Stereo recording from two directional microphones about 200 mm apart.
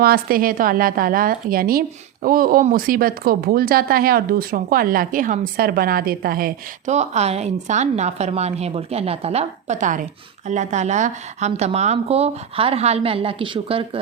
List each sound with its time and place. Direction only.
0.0 s a woman's voice: 50° right (ahead or behind); by 14.0 s 25° right (ahead or behind)